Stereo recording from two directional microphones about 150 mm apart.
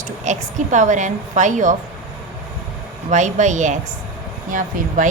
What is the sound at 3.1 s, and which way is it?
Speech, 55° right (ahead or behind).